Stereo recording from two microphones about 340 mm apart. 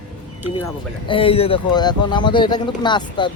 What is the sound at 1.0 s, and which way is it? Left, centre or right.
Speech, centre.